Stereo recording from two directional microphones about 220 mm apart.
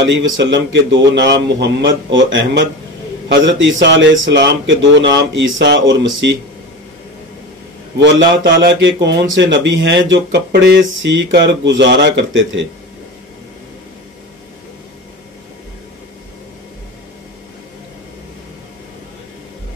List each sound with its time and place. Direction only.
0.0 s speech: 55° right (ahead or behind)
3.4 s speech: 55° right (ahead or behind)
8.3 s speech: 50° right (ahead or behind)